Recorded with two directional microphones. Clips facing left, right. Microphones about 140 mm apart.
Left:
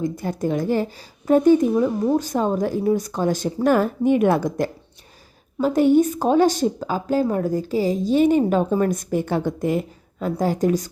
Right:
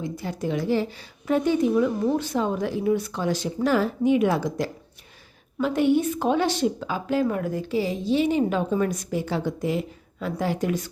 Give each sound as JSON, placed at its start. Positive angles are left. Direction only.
{"t": 0.0, "sound": "speech", "side_deg": 45}
{"t": 5.5, "sound": "a woman's voice", "side_deg": 40}